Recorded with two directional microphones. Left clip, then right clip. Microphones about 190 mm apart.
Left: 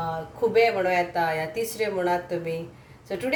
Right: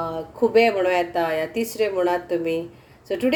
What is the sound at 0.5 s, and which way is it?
A woman's voice, 40° right (ahead or behind).